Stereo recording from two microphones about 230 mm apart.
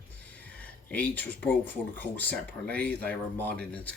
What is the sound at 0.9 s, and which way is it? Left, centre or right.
Speech, centre.